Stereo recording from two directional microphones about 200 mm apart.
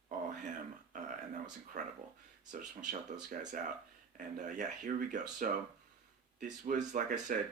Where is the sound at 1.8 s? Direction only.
40° right (ahead or behind).